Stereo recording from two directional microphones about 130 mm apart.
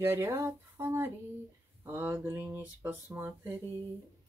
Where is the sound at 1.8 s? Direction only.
15° right (ahead or behind).